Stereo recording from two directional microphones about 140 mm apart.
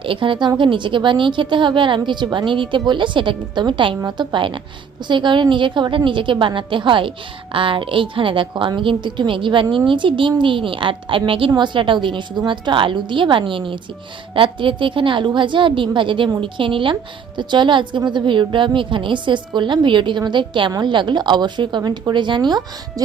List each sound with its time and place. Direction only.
0.0 s a woman's voice: 40° right (ahead or behind)